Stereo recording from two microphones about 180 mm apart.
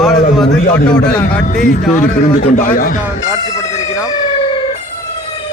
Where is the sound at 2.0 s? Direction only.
50° left (ahead or behind).